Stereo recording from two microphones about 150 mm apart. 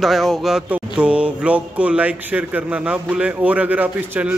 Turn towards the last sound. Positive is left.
turn(degrees=-10)  # may be behind; listen again after turning